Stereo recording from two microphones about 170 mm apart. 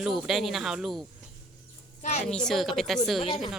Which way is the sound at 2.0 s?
40° left (ahead or behind).